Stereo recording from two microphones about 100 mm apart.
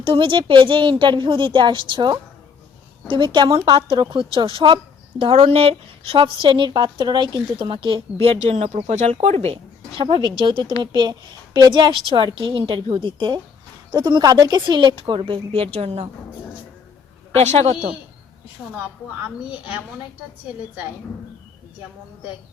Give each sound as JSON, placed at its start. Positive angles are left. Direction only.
{"t": 0.0, "sound": "a woman's voice", "side_deg": -60}
{"t": 5.2, "sound": "a woman's voice", "side_deg": -80}
{"t": 8.2, "sound": "speech", "side_deg": -80}
{"t": 10.0, "sound": "a woman's voice", "side_deg": -55}
{"t": 17.3, "sound": "speech", "side_deg": -90}